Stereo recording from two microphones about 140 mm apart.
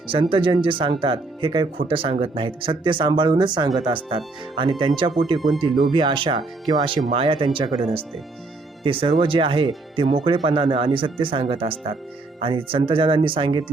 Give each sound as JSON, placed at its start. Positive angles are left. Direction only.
{"t": 0.1, "sound": "speech", "side_deg": -40}